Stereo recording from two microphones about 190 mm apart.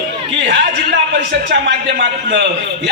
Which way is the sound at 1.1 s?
65° right (ahead or behind).